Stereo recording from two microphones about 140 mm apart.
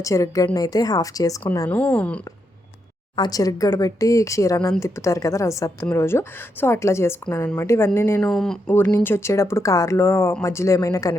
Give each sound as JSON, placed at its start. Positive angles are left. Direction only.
{"t": 0.0, "sound": "a woman's voice", "side_deg": 20}
{"t": 1.7, "sound": "speech", "side_deg": 10}
{"t": 3.2, "sound": "a woman's voice", "side_deg": 25}
{"t": 8.2, "sound": "speech", "side_deg": 5}
{"t": 8.6, "sound": "a woman's voice", "side_deg": 15}